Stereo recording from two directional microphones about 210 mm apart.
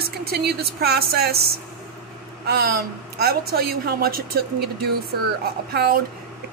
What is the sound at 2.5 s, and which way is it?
A woman's voice, 50° right (ahead or behind).